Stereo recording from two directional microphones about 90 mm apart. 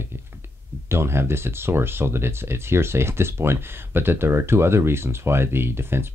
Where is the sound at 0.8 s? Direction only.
30° right (ahead or behind).